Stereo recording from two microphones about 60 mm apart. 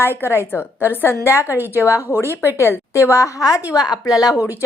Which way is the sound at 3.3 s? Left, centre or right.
Left.